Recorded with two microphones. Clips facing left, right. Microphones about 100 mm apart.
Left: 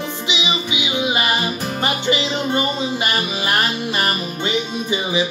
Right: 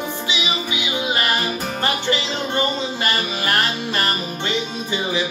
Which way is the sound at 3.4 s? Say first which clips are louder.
Even; 15° left (ahead or behind).